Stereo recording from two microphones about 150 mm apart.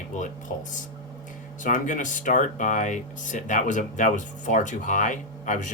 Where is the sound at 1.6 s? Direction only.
60° left (ahead or behind).